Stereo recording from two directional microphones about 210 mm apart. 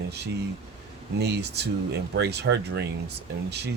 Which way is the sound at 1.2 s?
55° right (ahead or behind).